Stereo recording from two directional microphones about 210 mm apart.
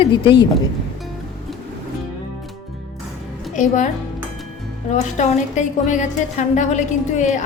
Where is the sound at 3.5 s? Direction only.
35° left (ahead or behind).